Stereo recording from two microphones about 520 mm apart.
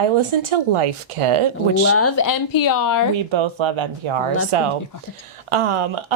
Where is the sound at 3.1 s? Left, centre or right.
Right.